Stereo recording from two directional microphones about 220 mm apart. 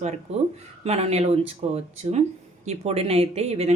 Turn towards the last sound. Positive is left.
turn(degrees=-30)  # may be behind; listen again after turning